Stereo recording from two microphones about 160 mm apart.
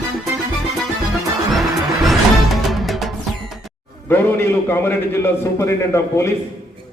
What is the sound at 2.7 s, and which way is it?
Music, centre (ahead or behind).